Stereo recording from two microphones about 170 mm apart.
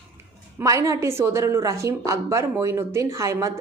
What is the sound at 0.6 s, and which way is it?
Speech, 20° right (ahead or behind).